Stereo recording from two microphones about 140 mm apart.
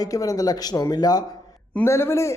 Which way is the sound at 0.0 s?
25° left (ahead or behind).